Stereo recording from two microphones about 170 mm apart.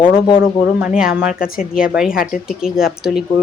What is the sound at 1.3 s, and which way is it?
Speech, 55° left (ahead or behind).